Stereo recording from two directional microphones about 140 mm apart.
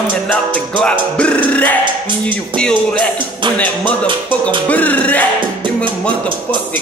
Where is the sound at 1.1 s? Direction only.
10° left (ahead or behind).